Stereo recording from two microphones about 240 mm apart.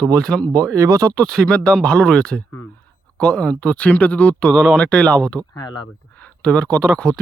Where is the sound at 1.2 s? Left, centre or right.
Centre.